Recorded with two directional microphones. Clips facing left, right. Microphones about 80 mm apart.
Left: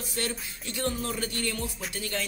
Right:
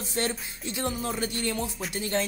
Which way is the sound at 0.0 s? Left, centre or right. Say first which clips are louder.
Right 3 dB; right.